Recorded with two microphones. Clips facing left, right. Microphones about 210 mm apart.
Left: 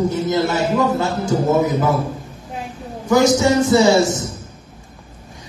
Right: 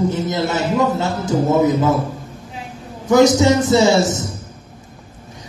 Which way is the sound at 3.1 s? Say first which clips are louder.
Right 2 dB; 20° right (ahead or behind).